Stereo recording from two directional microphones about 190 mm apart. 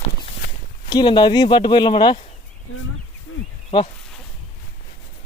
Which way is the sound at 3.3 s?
90° left.